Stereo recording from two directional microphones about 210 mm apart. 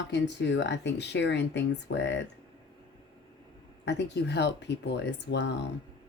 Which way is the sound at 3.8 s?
55° left (ahead or behind).